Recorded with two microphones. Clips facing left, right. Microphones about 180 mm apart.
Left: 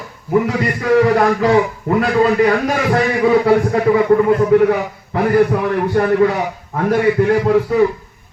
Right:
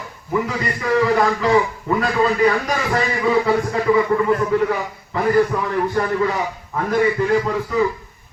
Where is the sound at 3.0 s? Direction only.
60° left (ahead or behind).